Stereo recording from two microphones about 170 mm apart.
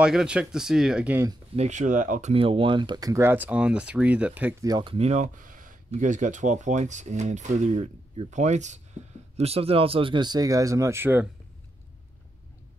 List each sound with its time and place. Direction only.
0.0 s speech: 5° right (ahead or behind)
1.6 s speech: 45° right (ahead or behind)
2.3 s speech: 30° right (ahead or behind); by 4.6 s 10° right (ahead or behind)
4.6 s speech: 25° right (ahead or behind)
4.9 s speech: 40° right (ahead or behind); by 11.2 s 10° right (ahead or behind)